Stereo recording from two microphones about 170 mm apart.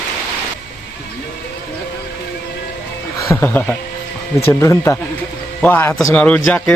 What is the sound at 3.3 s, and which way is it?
A man's voice, 10° left (ahead or behind).